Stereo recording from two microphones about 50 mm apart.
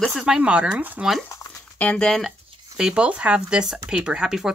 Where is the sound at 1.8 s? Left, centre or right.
Left.